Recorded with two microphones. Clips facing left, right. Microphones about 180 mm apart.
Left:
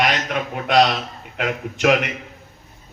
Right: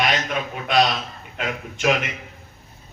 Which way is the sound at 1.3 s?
65° left (ahead or behind).